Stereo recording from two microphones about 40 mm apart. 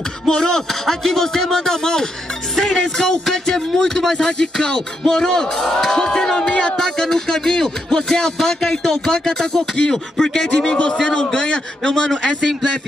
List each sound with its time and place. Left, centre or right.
0.3 s a man's voice: centre